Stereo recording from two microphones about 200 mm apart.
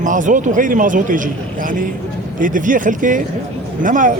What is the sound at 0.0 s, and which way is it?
A man's voice, 40° right (ahead or behind).